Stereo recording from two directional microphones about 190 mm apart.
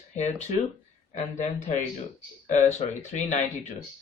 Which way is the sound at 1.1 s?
40° left (ahead or behind).